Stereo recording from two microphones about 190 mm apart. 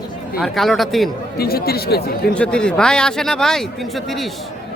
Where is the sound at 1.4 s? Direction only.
55° left (ahead or behind).